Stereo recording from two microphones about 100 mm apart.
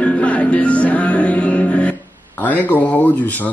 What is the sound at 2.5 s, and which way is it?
Speech, 20° left (ahead or behind).